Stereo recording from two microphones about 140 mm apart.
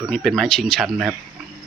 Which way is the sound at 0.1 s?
5° left (ahead or behind).